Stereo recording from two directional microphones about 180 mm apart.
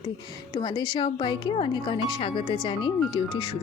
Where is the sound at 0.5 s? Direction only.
25° left (ahead or behind).